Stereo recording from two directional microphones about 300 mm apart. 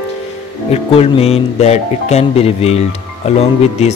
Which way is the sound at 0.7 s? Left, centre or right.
Centre.